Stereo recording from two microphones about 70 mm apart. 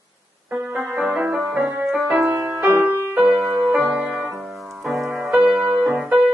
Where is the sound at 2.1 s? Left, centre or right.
Right.